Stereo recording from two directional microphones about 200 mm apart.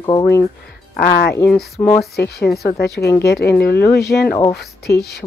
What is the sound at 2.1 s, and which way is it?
Speech, 55° left (ahead or behind).